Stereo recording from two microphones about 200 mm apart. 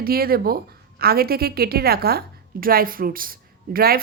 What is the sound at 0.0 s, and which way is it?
A woman's voice, 50° right (ahead or behind).